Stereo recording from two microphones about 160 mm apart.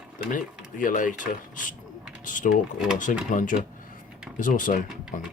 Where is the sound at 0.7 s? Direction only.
55° left (ahead or behind).